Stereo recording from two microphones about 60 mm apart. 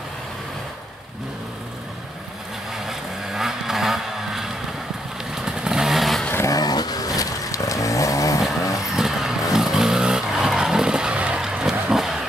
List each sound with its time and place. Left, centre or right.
2.7 s vehicle: centre
5.3 s motorcycle: centre
6.5 s chainsaw: left
8.9 s vehicle: centre